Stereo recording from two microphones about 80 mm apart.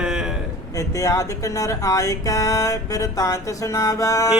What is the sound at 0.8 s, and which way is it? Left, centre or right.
Speech, left.